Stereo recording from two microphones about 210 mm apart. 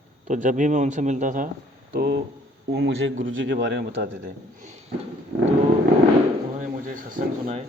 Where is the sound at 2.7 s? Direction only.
65° right (ahead or behind).